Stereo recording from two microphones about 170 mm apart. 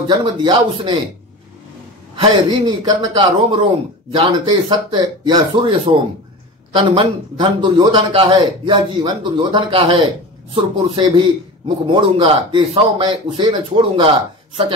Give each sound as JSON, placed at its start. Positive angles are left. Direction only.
{"t": 0.1, "sound": "a man's voice", "side_deg": -25}
{"t": 2.1, "sound": "a man's voice", "side_deg": -25}